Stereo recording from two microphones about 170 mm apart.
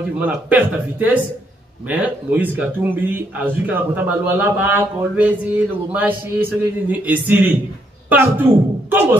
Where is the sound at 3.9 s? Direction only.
10° right (ahead or behind).